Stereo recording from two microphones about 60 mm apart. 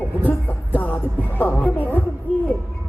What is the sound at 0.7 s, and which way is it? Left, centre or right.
Music, left.